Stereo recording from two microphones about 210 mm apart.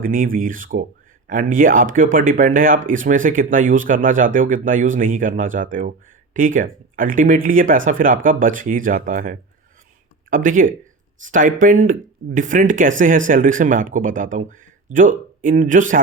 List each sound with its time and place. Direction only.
0.0 s speech: 40° right (ahead or behind)